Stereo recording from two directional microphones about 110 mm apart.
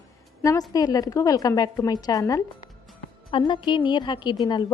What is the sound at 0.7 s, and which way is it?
A woman's voice, 35° left (ahead or behind).